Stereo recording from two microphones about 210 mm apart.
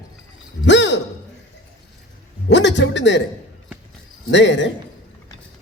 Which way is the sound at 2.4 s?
55° left (ahead or behind).